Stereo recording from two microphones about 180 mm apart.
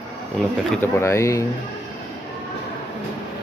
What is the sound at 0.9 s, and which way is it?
Speech, 15° left (ahead or behind).